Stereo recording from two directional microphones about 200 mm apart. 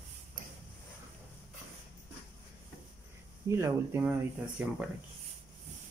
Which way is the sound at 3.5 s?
15° right (ahead or behind).